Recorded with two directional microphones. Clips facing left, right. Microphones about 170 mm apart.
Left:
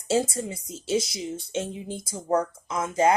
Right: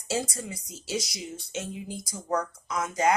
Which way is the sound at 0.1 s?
25° left (ahead or behind).